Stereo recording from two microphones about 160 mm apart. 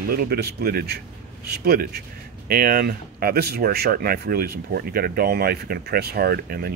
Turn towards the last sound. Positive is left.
turn(degrees=-75)  # may be behind; listen again after turning